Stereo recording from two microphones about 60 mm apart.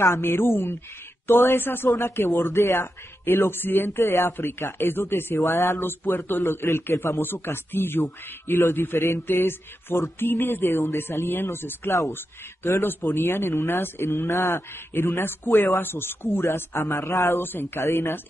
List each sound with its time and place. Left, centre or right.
0.0 s a man's voice: left
3.3 s a man's voice: left
4.0 s speech: left
4.3 s a man's voice: left
5.4 s speech: left
5.9 s a man's voice: left